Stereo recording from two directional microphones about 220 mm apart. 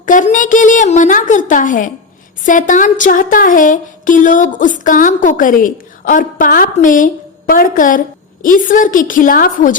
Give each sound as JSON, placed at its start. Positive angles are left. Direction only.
{"t": 0.0, "sound": "a woman's voice", "side_deg": 35}